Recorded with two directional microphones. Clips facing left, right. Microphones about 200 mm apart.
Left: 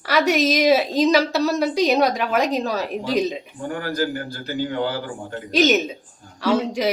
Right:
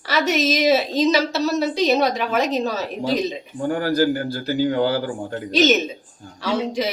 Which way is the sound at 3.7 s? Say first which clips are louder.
Right 5 dB; 30° right (ahead or behind).